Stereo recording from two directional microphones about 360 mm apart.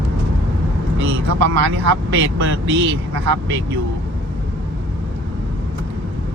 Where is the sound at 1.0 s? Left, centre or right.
Right.